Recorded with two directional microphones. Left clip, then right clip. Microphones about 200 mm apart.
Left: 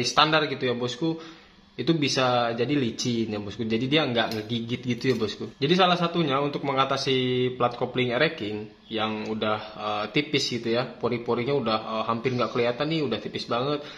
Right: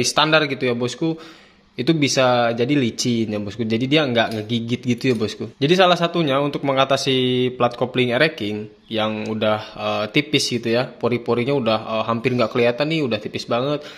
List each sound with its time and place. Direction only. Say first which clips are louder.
0.0 s speech: right 5 dB; 35° right (ahead or behind)